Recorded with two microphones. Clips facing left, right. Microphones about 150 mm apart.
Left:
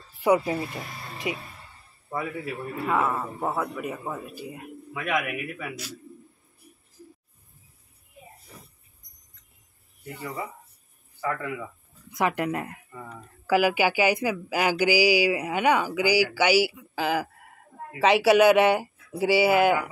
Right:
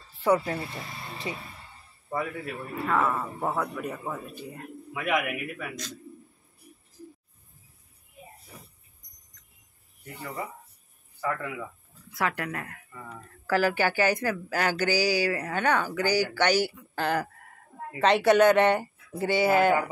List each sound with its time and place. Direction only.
0.2 s a man's voice: 10° left (ahead or behind)
11.1 s speech: centre (ahead or behind)
12.1 s speech: 20° left (ahead or behind)